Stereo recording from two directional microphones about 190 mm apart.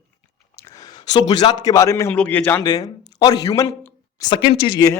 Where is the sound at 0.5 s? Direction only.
20° left (ahead or behind).